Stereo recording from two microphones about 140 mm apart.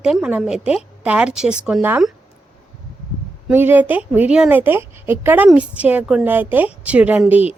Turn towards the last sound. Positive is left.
turn(degrees=-10)  # may be behind; listen again after turning